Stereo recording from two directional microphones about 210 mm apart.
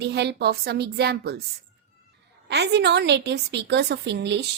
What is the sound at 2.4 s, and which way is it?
A woman's voice, 55° right (ahead or behind).